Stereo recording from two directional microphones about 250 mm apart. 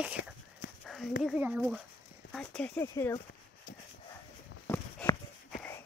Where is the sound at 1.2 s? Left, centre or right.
Centre.